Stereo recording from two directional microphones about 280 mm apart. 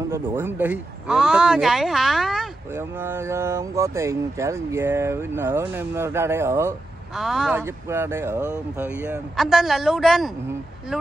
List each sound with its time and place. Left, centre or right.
0.1 s a man's voice: centre